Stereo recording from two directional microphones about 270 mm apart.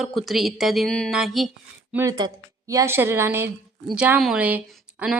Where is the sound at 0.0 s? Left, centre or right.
Centre.